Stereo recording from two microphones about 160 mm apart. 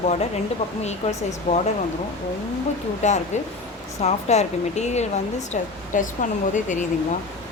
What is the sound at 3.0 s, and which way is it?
Speech, 50° left (ahead or behind).